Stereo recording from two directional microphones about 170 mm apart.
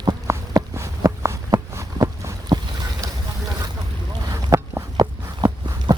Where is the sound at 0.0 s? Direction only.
20° right (ahead or behind).